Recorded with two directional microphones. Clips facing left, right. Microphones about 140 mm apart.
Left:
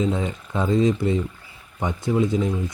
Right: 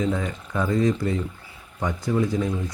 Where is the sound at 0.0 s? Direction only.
20° left (ahead or behind).